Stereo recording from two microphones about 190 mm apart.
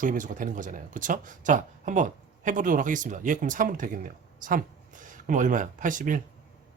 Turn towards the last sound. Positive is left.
turn(degrees=-45)  # may be behind; listen again after turning